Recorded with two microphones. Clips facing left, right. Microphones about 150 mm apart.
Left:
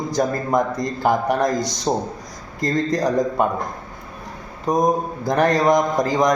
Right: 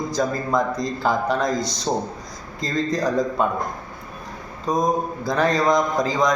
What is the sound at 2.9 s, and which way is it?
Speech, 20° left (ahead or behind).